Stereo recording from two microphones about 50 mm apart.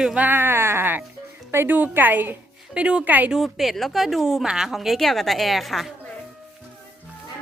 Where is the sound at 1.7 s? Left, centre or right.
Right.